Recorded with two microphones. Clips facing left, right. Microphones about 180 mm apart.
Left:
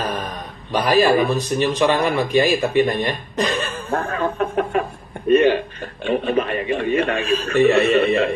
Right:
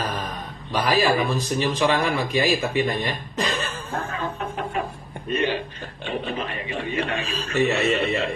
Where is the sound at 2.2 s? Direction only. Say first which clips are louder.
Left 5 dB; 55° left (ahead or behind).